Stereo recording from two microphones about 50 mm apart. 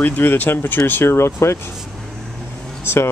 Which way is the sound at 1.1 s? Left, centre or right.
Left.